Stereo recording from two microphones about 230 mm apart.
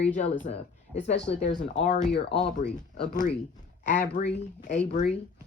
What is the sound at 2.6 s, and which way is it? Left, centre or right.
Speech, left.